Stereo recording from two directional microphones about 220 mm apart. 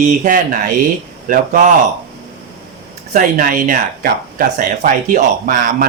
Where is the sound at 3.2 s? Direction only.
40° right (ahead or behind).